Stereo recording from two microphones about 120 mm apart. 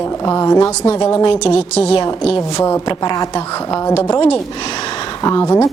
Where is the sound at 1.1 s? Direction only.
45° left (ahead or behind).